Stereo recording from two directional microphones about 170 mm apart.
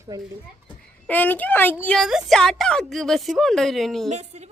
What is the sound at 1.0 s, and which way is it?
A woman's voice, 10° left (ahead or behind).